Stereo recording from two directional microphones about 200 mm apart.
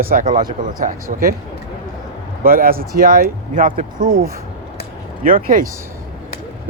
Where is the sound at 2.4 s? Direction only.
45° right (ahead or behind).